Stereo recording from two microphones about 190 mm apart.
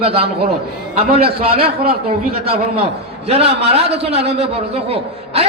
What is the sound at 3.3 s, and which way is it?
A man's voice, 30° right (ahead or behind).